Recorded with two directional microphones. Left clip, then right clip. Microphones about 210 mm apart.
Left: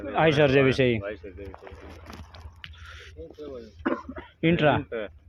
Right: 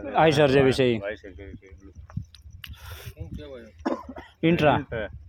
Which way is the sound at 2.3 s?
60° right (ahead or behind).